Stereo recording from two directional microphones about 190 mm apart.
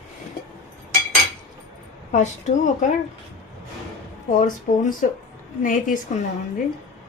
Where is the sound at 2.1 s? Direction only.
40° left (ahead or behind).